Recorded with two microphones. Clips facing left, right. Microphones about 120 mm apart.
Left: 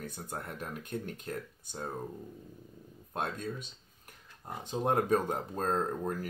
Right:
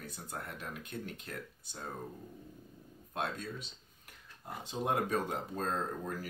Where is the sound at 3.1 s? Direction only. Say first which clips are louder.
Left 2 dB; 50° left (ahead or behind).